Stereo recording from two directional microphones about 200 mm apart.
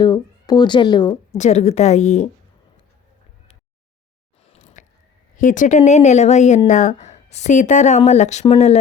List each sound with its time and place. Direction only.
0.0 s speech: 20° left (ahead or behind)
1.4 s speech: 35° left (ahead or behind)
4.6 s a sound: 40° left (ahead or behind)
5.4 s speech: 40° left (ahead or behind)